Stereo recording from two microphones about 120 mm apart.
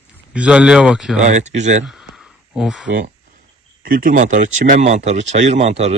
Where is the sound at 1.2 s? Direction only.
75° right (ahead or behind).